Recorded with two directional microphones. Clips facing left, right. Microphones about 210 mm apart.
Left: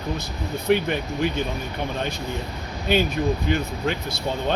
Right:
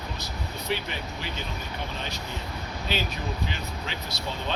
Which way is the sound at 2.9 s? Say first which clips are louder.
Left 11 dB; 50° left (ahead or behind).